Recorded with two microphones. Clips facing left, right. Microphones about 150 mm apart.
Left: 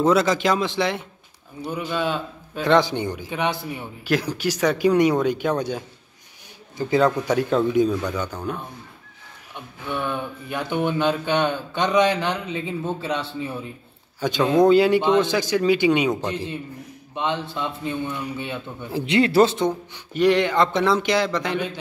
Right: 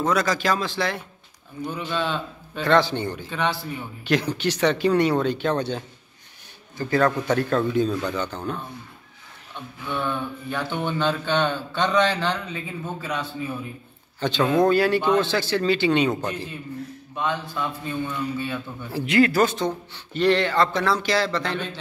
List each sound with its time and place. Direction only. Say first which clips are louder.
0.0 s a man's voice: left 4 dB; 25° left (ahead or behind)
14.2 s a man's voice: left 2 dB; 15° left (ahead or behind)
17.1 s a man's voice: left 2 dB; 25° left (ahead or behind)